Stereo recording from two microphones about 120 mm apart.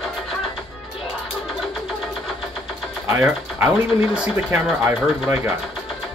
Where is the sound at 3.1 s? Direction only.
20° right (ahead or behind).